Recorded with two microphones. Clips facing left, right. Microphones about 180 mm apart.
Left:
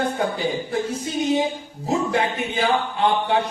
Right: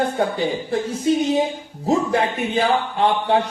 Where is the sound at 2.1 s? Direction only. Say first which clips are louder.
Right 3 dB; 35° right (ahead or behind).